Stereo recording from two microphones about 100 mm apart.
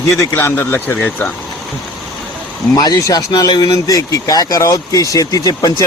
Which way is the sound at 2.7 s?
40° left (ahead or behind).